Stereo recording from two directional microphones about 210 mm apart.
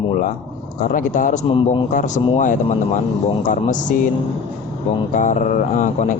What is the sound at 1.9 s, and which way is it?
Speech, 40° left (ahead or behind).